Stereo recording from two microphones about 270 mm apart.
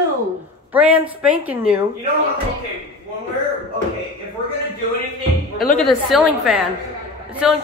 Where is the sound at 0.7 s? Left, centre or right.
Centre.